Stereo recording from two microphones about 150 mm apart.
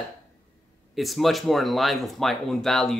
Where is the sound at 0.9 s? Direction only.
Centre (ahead or behind).